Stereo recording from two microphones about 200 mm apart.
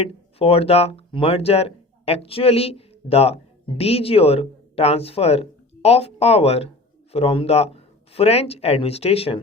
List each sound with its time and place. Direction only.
0.0 s speech: 30° left (ahead or behind)